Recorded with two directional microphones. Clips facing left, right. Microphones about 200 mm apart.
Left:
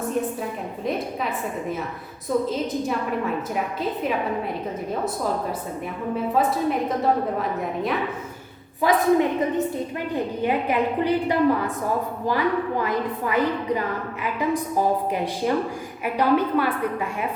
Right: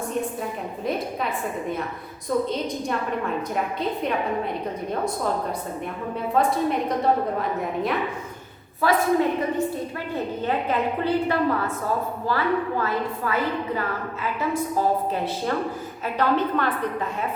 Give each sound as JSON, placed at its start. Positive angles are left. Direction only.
{"t": 0.9, "sound": "a woman's voice", "side_deg": 0}
{"t": 2.3, "sound": "a woman's voice", "side_deg": 0}
{"t": 3.5, "sound": "a woman's voice", "side_deg": 5}
{"t": 6.3, "sound": "a woman's voice", "side_deg": 5}
{"t": 8.8, "sound": "a woman's voice", "side_deg": 15}
{"t": 10.4, "sound": "a woman's voice", "side_deg": 15}